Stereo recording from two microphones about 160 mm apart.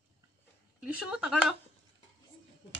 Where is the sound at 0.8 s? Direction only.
5° right (ahead or behind).